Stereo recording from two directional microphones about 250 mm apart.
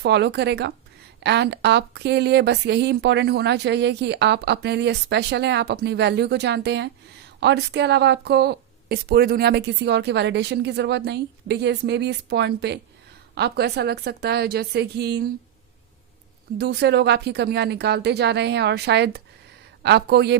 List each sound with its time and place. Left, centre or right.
0.0 s a woman's voice: right
16.6 s speech: right